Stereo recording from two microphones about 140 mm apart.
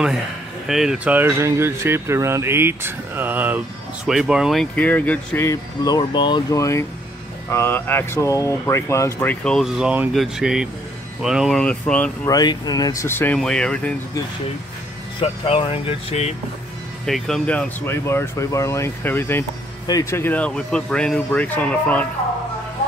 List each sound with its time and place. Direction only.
0.7 s speech: 5° right (ahead or behind)
4.7 s speech: 10° left (ahead or behind)
5.5 s speech: 30° left (ahead or behind); by 9.7 s 5° left (ahead or behind)
9.8 s speech: 5° right (ahead or behind)
11.6 s speech: 10° left (ahead or behind)
12.3 s speech: 30° left (ahead or behind); by 13.9 s 5° left (ahead or behind)
15.1 s speech: 40° left (ahead or behind)
17.0 s speech: 5° left (ahead or behind)